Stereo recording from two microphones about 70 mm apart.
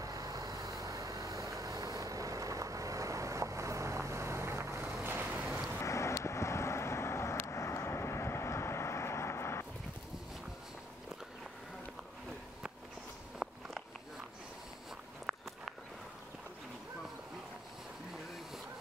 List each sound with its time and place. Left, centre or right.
0.0 s vehicle: right
5.8 s vehicle: left
13.4 s a sound: centre
15.3 s walk: centre